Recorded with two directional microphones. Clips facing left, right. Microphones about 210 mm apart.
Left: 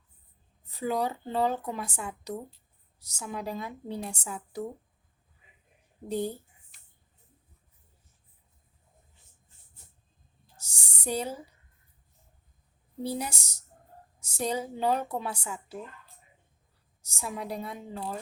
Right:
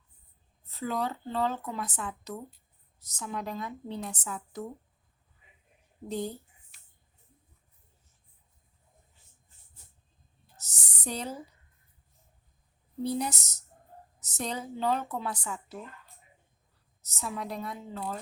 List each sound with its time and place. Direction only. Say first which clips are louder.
0.6 s a woman's voice: left 3 dB; 15° left (ahead or behind)
6.1 s a woman's voice: left 3 dB; 10° left (ahead or behind)
10.6 s a sound: left 1 dB; 10° left (ahead or behind)
13.0 s a woman's voice: right 2 dB; 10° left (ahead or behind)
17.1 s a woman's voice: left 1 dB; 10° left (ahead or behind)